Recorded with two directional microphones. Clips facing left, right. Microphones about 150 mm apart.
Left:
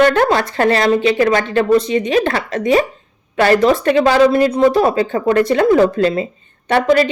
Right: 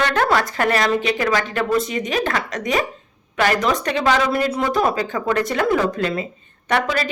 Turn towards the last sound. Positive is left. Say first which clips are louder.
# left 5 dB
turn(degrees=25)  # may be behind; listen again after turning